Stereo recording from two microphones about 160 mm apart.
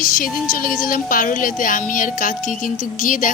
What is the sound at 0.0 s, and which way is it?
Speech, 60° left (ahead or behind).